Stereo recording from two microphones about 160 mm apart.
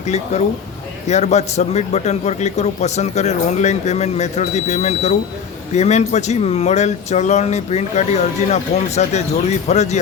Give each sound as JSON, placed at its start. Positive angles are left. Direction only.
{"t": 0.0, "sound": "speech", "side_deg": 45}